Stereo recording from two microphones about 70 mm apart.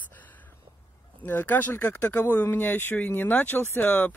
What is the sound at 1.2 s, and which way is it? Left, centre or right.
Speech, left.